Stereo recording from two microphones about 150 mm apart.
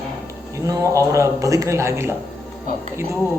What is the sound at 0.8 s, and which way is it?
A man's voice, 20° right (ahead or behind).